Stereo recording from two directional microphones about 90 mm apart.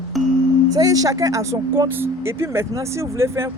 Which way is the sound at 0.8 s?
40° right (ahead or behind).